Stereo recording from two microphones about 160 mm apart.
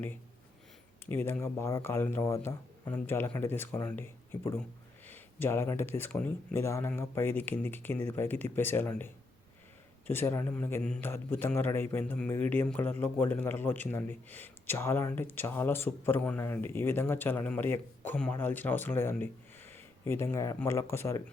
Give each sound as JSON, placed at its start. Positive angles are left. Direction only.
{"t": 1.0, "sound": "a man's voice", "side_deg": 15}
{"t": 10.1, "sound": "a man's voice", "side_deg": 15}
{"t": 19.1, "sound": "a sound", "side_deg": 15}
{"t": 20.6, "sound": "a man's voice", "side_deg": 15}